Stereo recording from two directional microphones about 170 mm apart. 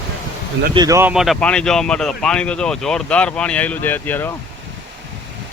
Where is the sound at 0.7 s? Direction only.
20° right (ahead or behind).